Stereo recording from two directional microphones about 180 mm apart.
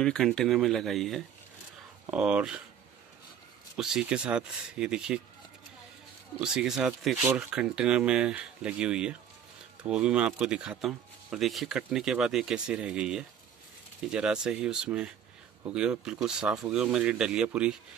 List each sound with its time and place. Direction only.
0.0 s speech: 5° left (ahead or behind)
3.7 s speech: 5° right (ahead or behind)
6.4 s speech: 5° right (ahead or behind)